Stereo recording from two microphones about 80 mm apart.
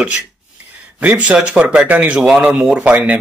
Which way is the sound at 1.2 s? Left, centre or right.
Centre.